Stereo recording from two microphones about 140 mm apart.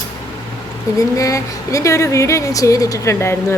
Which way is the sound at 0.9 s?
25° left (ahead or behind).